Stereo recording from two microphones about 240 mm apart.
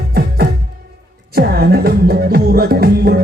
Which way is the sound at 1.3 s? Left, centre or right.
Right.